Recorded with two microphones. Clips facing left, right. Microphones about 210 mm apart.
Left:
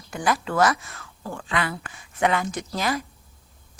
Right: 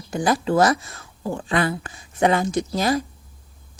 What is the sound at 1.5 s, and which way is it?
Speech, 40° right (ahead or behind).